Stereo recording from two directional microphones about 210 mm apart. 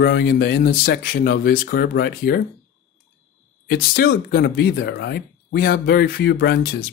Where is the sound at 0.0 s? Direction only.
50° left (ahead or behind).